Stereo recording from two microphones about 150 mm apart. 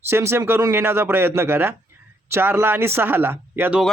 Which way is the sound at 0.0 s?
15° right (ahead or behind).